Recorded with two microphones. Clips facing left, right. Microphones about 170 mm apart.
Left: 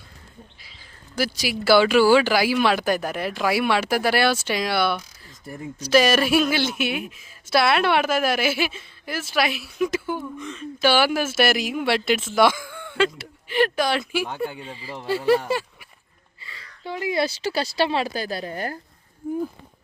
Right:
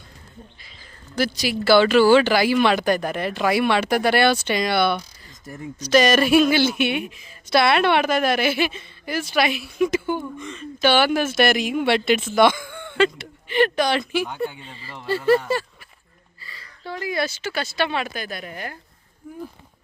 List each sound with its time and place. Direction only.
0.6 s speech: 5° left (ahead or behind)
16.4 s a woman's voice: 20° left (ahead or behind); by 18.8 s 40° left (ahead or behind)